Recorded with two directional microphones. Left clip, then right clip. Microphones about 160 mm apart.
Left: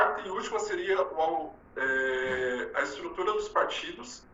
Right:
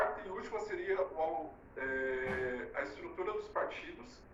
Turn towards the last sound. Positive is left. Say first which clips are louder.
# left 10 dB
turn(degrees=30)  # may be behind; listen again after turning